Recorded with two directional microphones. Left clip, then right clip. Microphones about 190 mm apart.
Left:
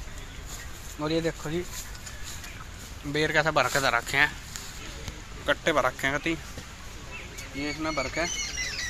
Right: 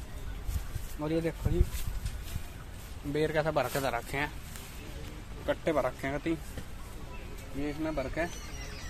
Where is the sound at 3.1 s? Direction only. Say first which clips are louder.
Left 5 dB; 15° left (ahead or behind).